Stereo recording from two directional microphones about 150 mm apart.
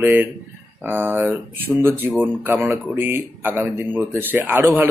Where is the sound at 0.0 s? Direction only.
10° right (ahead or behind).